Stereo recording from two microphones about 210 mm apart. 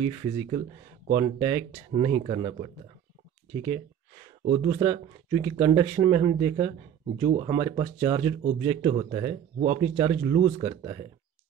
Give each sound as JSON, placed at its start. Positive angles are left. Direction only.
{"t": 0.0, "sound": "speech", "side_deg": -25}
{"t": 4.5, "sound": "speech", "side_deg": -30}
{"t": 4.7, "sound": "speech", "side_deg": -20}